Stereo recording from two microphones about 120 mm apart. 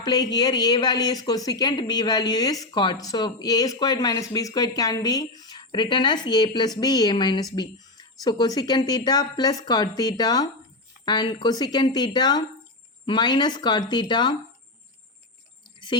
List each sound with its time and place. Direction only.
0.0 s a woman's voice: 35° left (ahead or behind)